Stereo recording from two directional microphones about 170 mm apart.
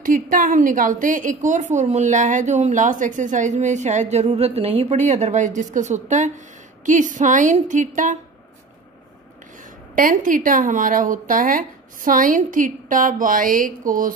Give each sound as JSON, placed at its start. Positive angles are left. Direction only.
{"t": 0.0, "sound": "speech", "side_deg": -50}
{"t": 9.9, "sound": "speech", "side_deg": -50}